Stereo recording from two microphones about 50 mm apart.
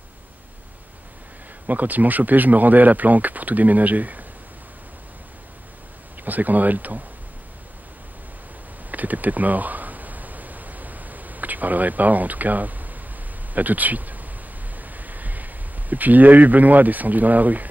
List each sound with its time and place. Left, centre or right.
1.7 s speech: right
6.2 s speech: right
8.9 s a sound: right
13.5 s speech: right